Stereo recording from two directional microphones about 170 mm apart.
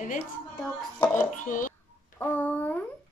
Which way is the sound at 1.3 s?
50° left (ahead or behind).